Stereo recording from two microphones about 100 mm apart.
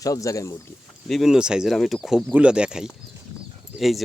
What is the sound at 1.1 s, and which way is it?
Speech, 5° right (ahead or behind).